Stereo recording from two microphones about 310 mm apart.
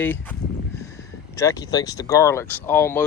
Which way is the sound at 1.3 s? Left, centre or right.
Centre.